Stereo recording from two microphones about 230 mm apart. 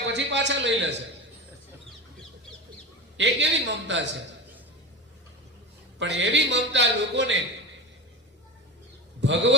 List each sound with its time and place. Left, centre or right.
0.0 s speech: right
3.2 s a man's voice: right
6.0 s a man's voice: right
9.2 s a man's voice: right